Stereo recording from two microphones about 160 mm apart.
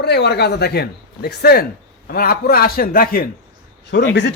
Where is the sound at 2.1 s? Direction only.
70° left (ahead or behind).